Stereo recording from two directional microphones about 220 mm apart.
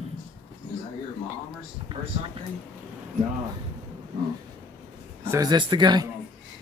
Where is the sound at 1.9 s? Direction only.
25° right (ahead or behind).